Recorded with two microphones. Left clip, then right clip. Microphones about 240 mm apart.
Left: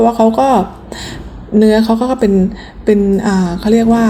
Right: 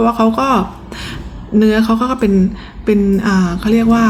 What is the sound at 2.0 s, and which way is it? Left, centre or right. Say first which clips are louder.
Speech: left 2 dB; centre.